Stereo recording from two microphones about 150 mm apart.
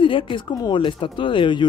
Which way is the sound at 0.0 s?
35° left (ahead or behind).